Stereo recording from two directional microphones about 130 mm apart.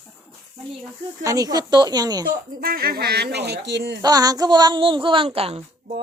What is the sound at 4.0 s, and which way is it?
A woman's voice, 30° right (ahead or behind).